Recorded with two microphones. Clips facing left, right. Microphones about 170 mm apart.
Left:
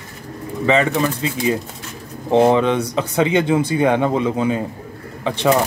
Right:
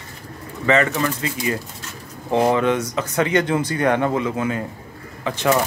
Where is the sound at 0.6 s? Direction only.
15° left (ahead or behind).